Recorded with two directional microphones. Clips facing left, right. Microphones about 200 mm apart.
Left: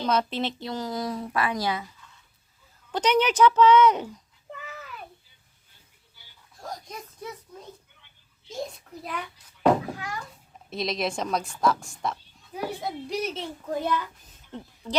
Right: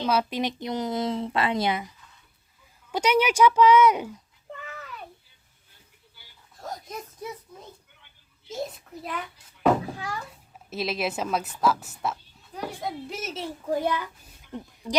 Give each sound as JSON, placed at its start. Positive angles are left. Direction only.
{"t": 0.0, "sound": "a woman's voice", "side_deg": -10}
{"t": 2.9, "sound": "a woman's voice", "side_deg": -10}
{"t": 4.6, "sound": "a sound", "side_deg": 0}
{"t": 6.6, "sound": "a sound", "side_deg": 0}
{"t": 8.4, "sound": "a child's voice", "side_deg": -5}
{"t": 10.7, "sound": "a woman's voice", "side_deg": -5}